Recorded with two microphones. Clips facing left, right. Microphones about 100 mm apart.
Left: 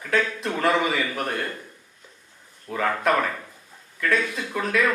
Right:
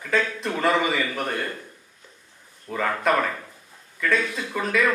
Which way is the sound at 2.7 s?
Centre (ahead or behind).